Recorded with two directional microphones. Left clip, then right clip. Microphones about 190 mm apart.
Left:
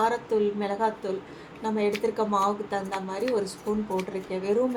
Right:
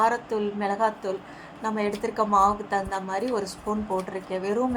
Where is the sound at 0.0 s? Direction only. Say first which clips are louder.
Right 1 dB; 15° right (ahead or behind).